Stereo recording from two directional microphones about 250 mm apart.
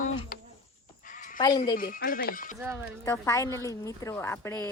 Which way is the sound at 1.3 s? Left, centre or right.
Centre.